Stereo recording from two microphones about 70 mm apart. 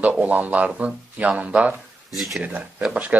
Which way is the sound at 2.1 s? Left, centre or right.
Centre.